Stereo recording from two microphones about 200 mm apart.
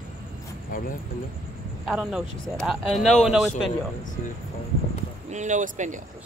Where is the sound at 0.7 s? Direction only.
40° left (ahead or behind).